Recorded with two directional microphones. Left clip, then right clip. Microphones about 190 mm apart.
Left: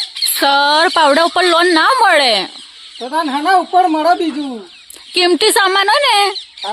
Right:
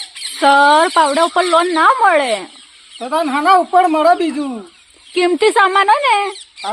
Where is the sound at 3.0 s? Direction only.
50° right (ahead or behind).